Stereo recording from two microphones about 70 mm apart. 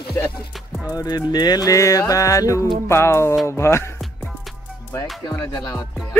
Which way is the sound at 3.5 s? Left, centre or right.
Left.